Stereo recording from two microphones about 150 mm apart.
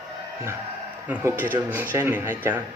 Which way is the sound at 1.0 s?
10° right (ahead or behind).